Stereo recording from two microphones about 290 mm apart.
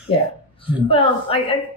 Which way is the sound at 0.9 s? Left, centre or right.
Centre.